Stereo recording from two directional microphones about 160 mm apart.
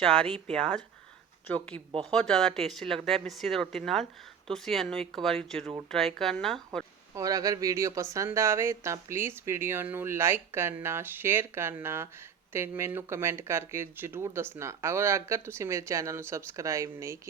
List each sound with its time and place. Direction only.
0.5 s speech: 5° left (ahead or behind)
7.2 s speech: 20° right (ahead or behind)